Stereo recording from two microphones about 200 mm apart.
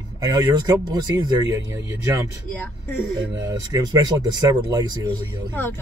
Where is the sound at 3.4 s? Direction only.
15° right (ahead or behind).